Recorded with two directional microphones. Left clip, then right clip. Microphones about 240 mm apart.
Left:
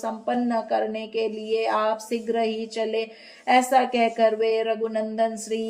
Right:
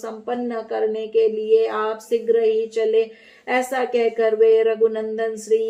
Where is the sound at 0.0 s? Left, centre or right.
Left.